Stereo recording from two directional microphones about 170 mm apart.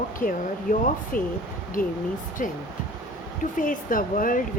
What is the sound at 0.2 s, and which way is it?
Speech, 55° left (ahead or behind).